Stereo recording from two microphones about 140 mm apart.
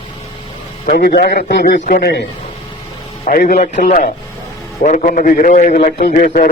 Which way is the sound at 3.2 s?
75° left (ahead or behind).